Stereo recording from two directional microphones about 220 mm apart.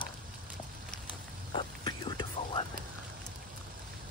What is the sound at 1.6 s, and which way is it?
Whispering, 20° left (ahead or behind).